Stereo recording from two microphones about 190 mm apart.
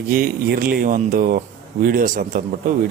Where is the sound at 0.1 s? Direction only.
50° right (ahead or behind).